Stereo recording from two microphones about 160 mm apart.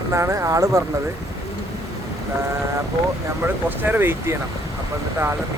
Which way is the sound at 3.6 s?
10° right (ahead or behind).